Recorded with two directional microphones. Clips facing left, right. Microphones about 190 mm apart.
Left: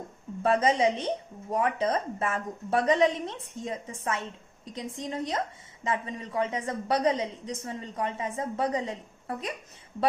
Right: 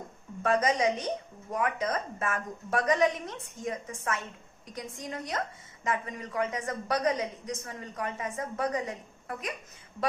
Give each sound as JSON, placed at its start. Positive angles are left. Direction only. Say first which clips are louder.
{"t": 0.4, "sound": "speech", "louder": "left 2 dB", "side_deg": 25}